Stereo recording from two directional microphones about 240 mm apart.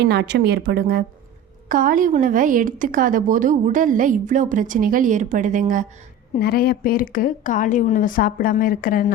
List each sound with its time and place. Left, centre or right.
0.0 s a woman's voice: right
6.4 s a woman's voice: left